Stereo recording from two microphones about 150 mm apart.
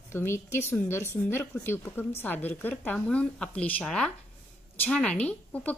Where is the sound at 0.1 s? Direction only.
15° left (ahead or behind).